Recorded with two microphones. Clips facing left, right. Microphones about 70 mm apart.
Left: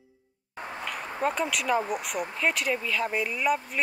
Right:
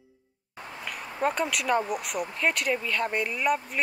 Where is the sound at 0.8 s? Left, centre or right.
Centre.